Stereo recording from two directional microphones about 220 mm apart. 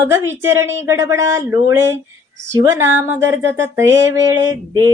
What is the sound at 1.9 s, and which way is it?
Speech, 55° right (ahead or behind).